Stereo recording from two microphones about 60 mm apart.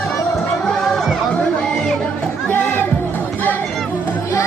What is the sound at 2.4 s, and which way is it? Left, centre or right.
Music, left.